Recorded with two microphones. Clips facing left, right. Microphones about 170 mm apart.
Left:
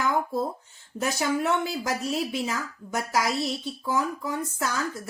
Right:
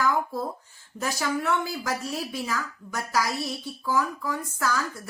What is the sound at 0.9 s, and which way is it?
Speech, 25° left (ahead or behind).